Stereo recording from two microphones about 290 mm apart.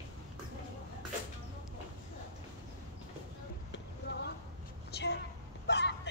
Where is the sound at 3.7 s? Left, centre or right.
Left.